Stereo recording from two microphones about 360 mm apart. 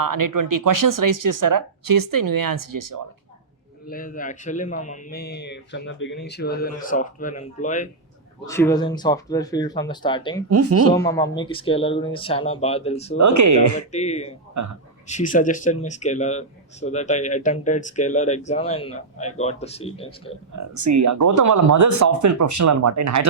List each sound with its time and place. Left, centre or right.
0.0 s speech: right
3.8 s speech: left
8.4 s speech: centre
10.5 s speech: right
10.9 s speech: centre
13.1 s speech: right
13.9 s speech: centre
14.6 s speech: right
15.0 s speech: left
20.6 s speech: right